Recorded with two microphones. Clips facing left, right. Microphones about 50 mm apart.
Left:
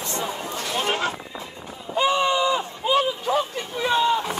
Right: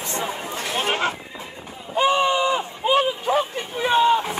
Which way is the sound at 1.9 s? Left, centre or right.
Right.